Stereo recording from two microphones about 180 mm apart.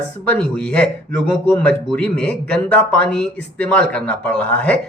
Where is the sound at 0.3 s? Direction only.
5° left (ahead or behind).